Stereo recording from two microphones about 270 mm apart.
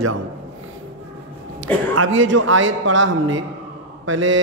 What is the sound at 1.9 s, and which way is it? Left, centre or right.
A man's voice, right.